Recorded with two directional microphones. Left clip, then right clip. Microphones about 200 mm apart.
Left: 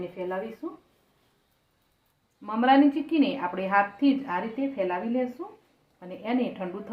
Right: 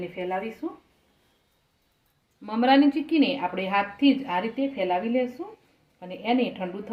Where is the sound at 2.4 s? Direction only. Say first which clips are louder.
Even; 30° right (ahead or behind).